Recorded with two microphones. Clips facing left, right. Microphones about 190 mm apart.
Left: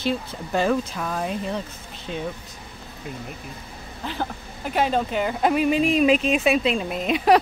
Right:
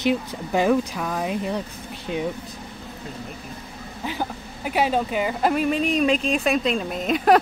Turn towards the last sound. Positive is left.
turn(degrees=0)  # may be behind; listen again after turning